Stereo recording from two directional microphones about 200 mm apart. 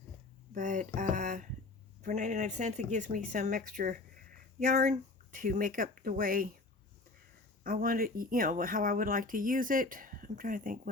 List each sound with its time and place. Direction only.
0.5 s speech: 40° right (ahead or behind)
7.6 s speech: 45° right (ahead or behind)